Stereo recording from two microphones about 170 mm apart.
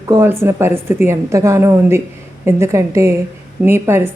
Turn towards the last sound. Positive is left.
turn(degrees=-15)  # may be behind; listen again after turning